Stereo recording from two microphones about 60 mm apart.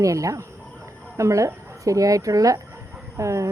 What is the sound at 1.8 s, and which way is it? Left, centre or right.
Speech, right.